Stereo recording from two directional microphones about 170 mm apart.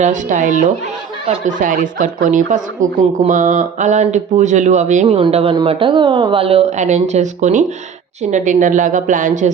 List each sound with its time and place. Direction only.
0.0 s speech: 45° right (ahead or behind)